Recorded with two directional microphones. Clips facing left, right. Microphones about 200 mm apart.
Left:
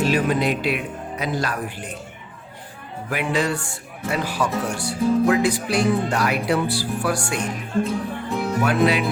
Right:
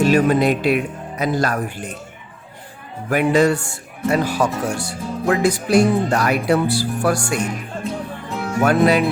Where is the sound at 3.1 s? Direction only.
45° right (ahead or behind).